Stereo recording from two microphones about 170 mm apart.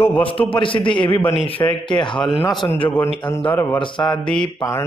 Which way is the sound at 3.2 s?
30° left (ahead or behind).